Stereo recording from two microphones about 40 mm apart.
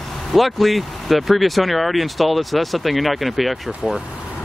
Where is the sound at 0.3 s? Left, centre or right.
Centre.